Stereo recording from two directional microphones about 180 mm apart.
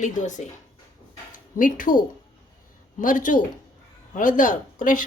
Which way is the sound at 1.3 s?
50° left (ahead or behind).